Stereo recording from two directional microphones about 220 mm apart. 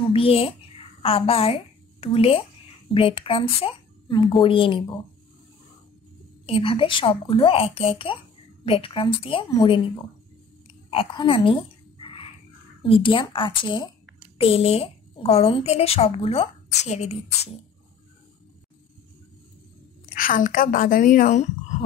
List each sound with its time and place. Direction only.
0.1 s a woman's voice: 25° left (ahead or behind)
6.4 s a woman's voice: 25° left (ahead or behind)
10.9 s a woman's voice: 25° left (ahead or behind)
12.0 s a sound: 25° left (ahead or behind)
12.8 s a woman's voice: 25° left (ahead or behind)
20.2 s a woman's voice: 40° left (ahead or behind)